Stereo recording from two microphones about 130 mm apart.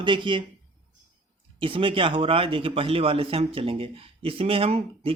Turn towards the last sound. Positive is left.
turn(degrees=-50)  # may be behind; listen again after turning